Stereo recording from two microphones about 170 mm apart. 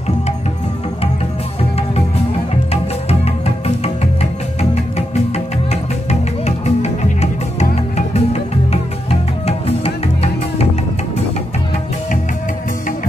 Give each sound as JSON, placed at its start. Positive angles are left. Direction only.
{"t": 1.6, "sound": "music", "side_deg": 40}